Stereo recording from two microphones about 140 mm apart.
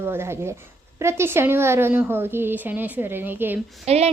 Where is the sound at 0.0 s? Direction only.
15° right (ahead or behind).